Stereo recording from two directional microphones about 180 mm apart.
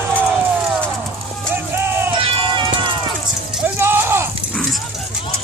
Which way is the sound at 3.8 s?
15° right (ahead or behind).